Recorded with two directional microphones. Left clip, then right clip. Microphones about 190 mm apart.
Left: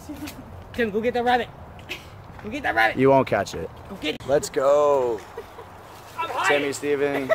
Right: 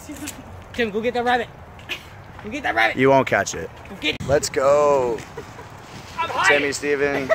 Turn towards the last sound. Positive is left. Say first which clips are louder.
# right 2 dB
turn(degrees=-5)  # may be behind; listen again after turning